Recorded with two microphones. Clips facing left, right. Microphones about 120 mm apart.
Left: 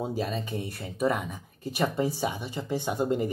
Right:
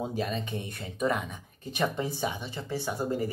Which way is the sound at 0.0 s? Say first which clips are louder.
Left 1 dB; 5° left (ahead or behind).